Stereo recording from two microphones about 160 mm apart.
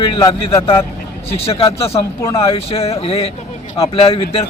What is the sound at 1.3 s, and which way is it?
Speech, 40° left (ahead or behind).